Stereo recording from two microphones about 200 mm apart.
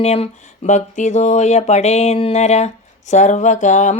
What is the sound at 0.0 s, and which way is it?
Speech, 30° left (ahead or behind).